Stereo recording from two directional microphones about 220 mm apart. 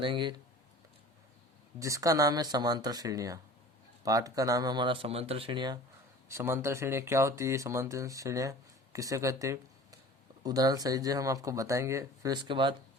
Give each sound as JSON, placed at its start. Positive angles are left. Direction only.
{"t": 0.0, "sound": "speech", "side_deg": -20}
{"t": 1.8, "sound": "speech", "side_deg": -15}